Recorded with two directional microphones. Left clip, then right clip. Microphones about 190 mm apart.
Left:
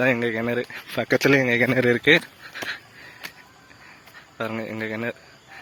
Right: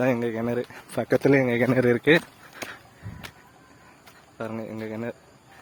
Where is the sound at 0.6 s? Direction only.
20° right (ahead or behind).